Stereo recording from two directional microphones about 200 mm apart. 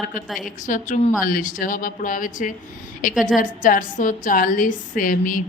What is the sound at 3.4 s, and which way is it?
A woman's voice, 40° left (ahead or behind).